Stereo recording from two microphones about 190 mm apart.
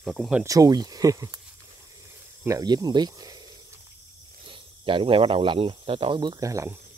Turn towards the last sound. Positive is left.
turn(degrees=-15)  # may be behind; listen again after turning